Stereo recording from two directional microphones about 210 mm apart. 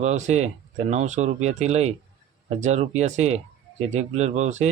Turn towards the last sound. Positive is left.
turn(degrees=-35)  # may be behind; listen again after turning